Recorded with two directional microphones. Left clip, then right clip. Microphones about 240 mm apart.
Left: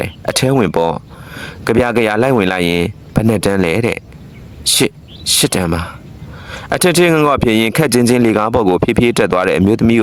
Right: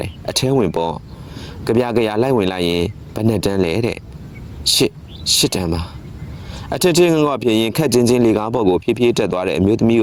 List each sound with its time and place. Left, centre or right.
0.0 s speech: left